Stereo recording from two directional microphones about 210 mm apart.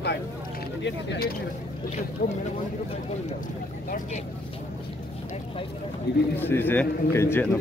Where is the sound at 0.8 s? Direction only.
55° left (ahead or behind).